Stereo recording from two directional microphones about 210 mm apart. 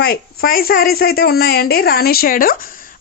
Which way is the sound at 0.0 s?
45° left (ahead or behind).